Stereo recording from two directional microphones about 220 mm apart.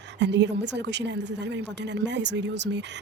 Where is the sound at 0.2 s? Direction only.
50° right (ahead or behind).